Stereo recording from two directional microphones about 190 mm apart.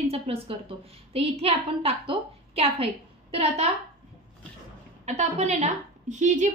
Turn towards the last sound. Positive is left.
turn(degrees=-40)  # may be behind; listen again after turning